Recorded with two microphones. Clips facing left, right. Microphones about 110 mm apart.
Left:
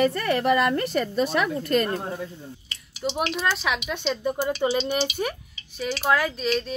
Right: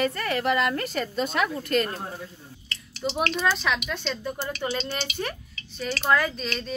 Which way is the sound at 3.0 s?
5° left (ahead or behind).